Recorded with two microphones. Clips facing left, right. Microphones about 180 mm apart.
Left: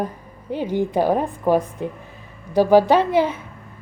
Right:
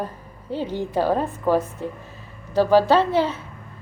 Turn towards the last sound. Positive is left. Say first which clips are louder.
# left 2 dB
turn(degrees=10)  # may be behind; listen again after turning